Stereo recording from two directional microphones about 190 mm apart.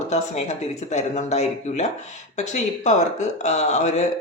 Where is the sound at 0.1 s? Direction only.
35° left (ahead or behind).